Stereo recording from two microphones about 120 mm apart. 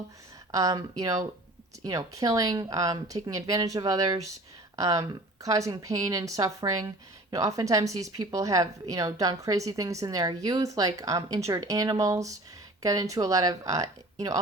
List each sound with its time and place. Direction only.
0.5 s a woman's voice: 30° right (ahead or behind)